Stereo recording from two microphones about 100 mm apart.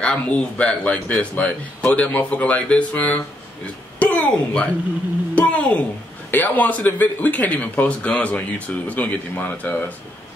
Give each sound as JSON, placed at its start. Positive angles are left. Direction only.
{"t": 0.0, "sound": "a woman's voice", "side_deg": 10}